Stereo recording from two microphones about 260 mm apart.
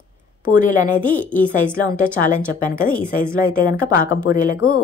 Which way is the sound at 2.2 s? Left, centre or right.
Left.